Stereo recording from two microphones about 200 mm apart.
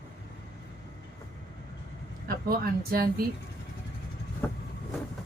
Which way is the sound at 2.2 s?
50° right (ahead or behind).